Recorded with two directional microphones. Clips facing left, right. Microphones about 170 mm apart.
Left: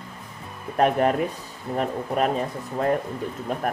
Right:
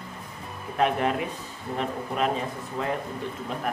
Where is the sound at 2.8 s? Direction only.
45° left (ahead or behind).